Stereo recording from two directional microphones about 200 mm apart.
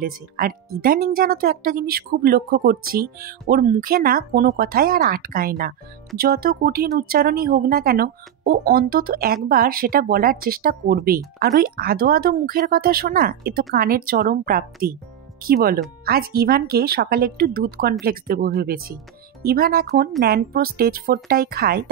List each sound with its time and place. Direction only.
0.0 s speech: 45° right (ahead or behind)